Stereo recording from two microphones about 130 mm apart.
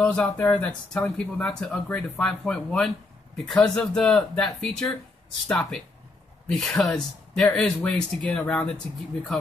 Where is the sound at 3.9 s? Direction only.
Centre (ahead or behind).